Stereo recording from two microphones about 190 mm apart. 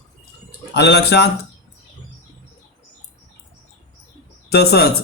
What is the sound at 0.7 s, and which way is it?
Speech, 60° left (ahead or behind).